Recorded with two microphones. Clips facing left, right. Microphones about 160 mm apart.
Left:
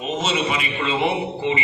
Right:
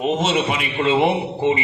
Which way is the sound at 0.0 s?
60° right (ahead or behind).